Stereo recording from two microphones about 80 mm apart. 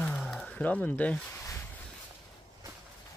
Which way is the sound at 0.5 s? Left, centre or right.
Centre.